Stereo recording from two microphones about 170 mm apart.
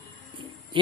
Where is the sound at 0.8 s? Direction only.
30° right (ahead or behind).